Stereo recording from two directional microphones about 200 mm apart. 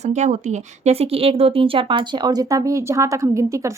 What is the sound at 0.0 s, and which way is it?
Speech, 35° right (ahead or behind).